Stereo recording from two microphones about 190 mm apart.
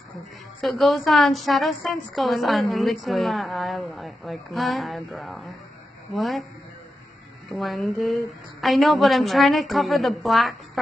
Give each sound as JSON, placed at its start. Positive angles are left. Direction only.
{"t": 0.6, "sound": "a woman's voice", "side_deg": 0}
{"t": 7.6, "sound": "a woman's voice", "side_deg": 0}